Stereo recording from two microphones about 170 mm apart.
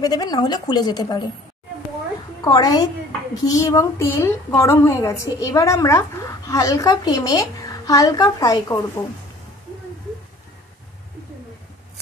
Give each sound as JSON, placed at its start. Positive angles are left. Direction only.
{"t": 0.0, "sound": "a woman's voice", "side_deg": 25}
{"t": 2.4, "sound": "a woman's voice", "side_deg": 25}